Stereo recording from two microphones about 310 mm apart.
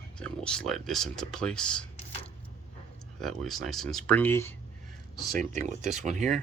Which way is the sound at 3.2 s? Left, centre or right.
Centre.